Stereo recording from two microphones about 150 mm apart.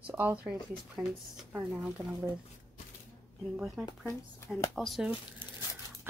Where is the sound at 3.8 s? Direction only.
10° right (ahead or behind).